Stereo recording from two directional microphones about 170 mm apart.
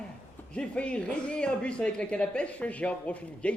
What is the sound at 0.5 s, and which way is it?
Speech, 5° left (ahead or behind).